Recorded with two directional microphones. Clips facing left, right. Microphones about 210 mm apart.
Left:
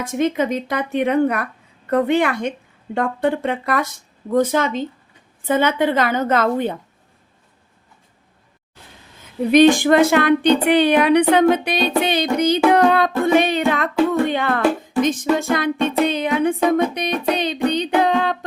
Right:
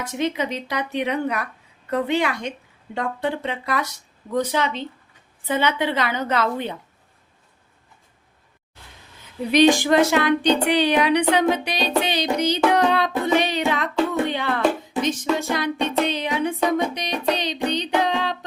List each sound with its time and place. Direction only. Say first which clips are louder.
0.0 s speech: left 5 dB; 50° left (ahead or behind)
9.5 s speech: left 4 dB; 50° left (ahead or behind)
12.7 s music: left 4 dB; 55° left (ahead or behind)
14.1 s speech: left 4 dB; 50° left (ahead or behind)
15.0 s music: left 4 dB; 50° left (ahead or behind)